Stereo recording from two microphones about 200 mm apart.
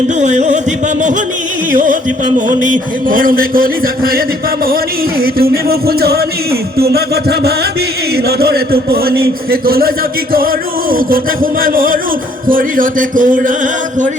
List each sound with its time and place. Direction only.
0.1 s music: 35° right (ahead or behind)
1.7 s music: 40° right (ahead or behind)
3.1 s a man's voice: 45° right (ahead or behind)